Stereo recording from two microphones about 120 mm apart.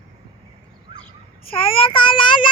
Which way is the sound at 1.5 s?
50° left (ahead or behind).